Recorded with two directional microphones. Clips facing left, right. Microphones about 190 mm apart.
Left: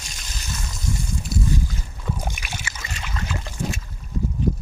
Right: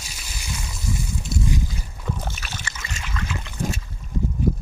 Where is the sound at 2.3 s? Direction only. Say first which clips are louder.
Left 1 dB; 15° left (ahead or behind).